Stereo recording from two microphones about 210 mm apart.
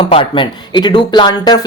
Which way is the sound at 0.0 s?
25° left (ahead or behind).